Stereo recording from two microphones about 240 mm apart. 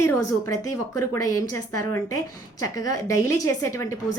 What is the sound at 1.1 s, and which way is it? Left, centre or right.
Speech, centre.